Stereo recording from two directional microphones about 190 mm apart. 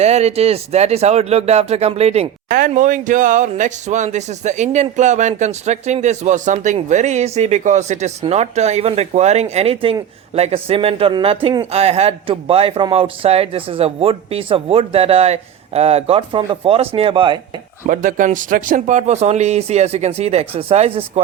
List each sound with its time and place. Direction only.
0.0 s speech: 35° right (ahead or behind)
2.5 s speech: 50° right (ahead or behind); by 17.4 s 25° right (ahead or behind)
17.8 s speech: 45° right (ahead or behind)